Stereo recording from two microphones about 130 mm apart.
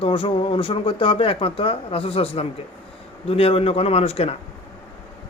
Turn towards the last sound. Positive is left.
turn(degrees=50)  # may be behind; listen again after turning